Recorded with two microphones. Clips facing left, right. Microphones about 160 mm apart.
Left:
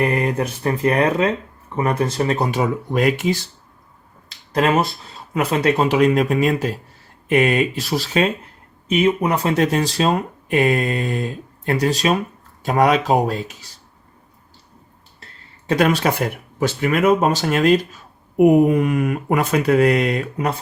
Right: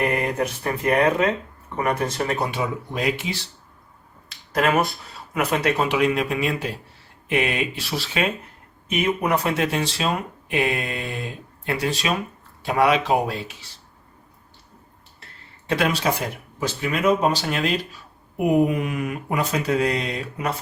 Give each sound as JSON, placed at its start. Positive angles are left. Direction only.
{"t": 0.1, "sound": "speech", "side_deg": 30}
{"t": 2.5, "sound": "speech", "side_deg": 50}
{"t": 4.5, "sound": "speech", "side_deg": 30}
{"t": 15.7, "sound": "speech", "side_deg": 45}
{"t": 16.6, "sound": "speech", "side_deg": 55}